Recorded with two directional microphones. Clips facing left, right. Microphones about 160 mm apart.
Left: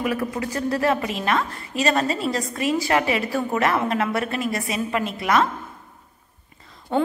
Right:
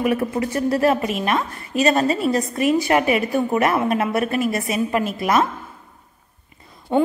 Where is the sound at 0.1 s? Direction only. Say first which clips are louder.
Right 4 dB; 30° right (ahead or behind).